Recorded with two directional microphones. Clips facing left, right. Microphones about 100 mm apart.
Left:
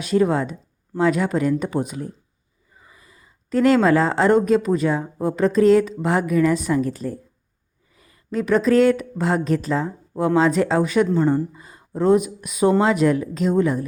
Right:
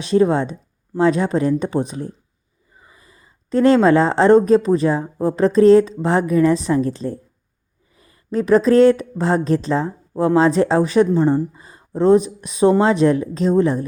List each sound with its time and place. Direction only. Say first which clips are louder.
0.0 s speech: right 3 dB; 30° right (ahead or behind)